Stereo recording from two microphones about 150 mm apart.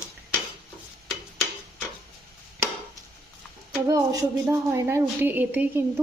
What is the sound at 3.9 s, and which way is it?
A woman's voice, 20° right (ahead or behind).